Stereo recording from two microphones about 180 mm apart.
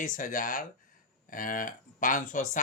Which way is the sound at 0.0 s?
50° left (ahead or behind).